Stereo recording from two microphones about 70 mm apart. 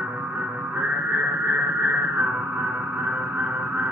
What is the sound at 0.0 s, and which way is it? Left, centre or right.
Music, right.